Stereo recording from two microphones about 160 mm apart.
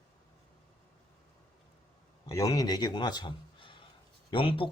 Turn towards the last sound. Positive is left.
turn(degrees=35)  # may be behind; listen again after turning